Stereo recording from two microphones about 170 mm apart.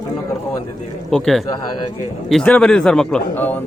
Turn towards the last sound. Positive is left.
turn(degrees=10)  # may be behind; listen again after turning